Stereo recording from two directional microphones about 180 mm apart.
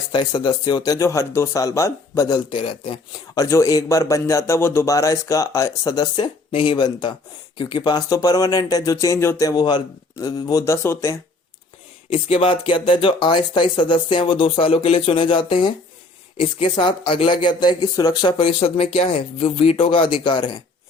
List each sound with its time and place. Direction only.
0.1 s speech: 25° left (ahead or behind)
12.1 s speech: 30° left (ahead or behind)